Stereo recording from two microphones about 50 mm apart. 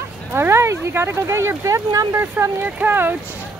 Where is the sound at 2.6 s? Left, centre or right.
Right.